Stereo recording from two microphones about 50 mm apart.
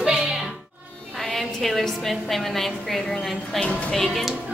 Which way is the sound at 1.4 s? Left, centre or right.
Centre.